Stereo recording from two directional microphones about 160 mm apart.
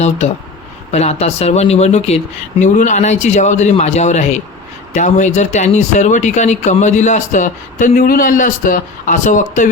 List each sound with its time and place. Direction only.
0.9 s speech: 45° left (ahead or behind)